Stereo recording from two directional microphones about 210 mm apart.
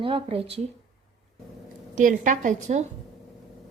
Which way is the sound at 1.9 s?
35° right (ahead or behind).